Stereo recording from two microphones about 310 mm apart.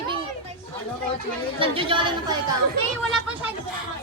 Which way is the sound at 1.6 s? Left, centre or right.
Centre.